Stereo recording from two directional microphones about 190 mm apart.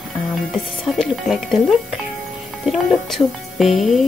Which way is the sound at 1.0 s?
Centre (ahead or behind).